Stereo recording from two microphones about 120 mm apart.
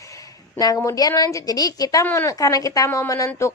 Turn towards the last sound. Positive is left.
turn(degrees=25)  # may be behind; listen again after turning